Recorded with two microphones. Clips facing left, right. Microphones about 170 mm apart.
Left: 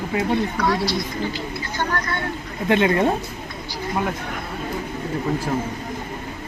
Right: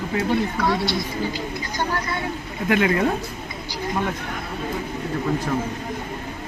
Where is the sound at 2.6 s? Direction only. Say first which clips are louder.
Left 2 dB; 25° left (ahead or behind).